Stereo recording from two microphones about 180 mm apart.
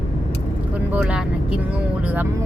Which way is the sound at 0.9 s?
5° right (ahead or behind).